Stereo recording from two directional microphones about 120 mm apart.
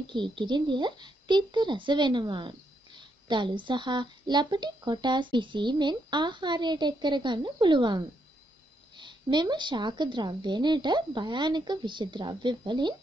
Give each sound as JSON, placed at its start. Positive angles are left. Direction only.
{"t": 0.1, "sound": "speech", "side_deg": -40}